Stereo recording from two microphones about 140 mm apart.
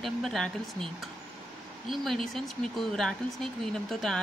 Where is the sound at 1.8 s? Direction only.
Centre (ahead or behind).